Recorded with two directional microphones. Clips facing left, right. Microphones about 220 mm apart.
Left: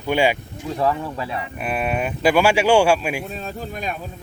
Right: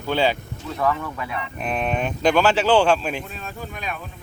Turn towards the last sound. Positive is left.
turn(degrees=40)  # may be behind; listen again after turning